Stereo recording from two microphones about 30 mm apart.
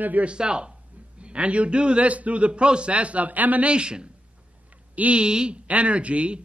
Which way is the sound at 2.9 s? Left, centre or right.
Right.